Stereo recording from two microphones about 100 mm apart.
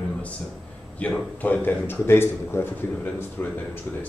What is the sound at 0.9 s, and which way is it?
Speech, 15° left (ahead or behind).